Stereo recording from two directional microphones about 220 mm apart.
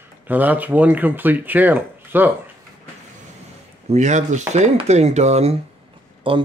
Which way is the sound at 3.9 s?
30° right (ahead or behind).